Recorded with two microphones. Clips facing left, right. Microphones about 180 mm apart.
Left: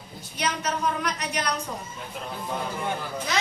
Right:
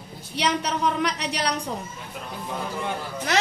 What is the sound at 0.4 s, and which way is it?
A woman's voice, 70° right (ahead or behind).